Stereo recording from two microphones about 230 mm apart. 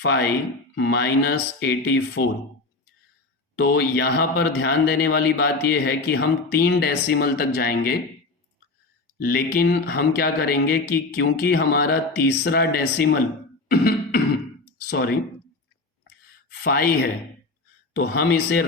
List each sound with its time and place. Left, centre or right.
0.0 s a man's voice: left
3.5 s a man's voice: left
9.1 s a man's voice: left
13.7 s beatboxing: left
14.8 s speech: left
16.5 s a man's voice: left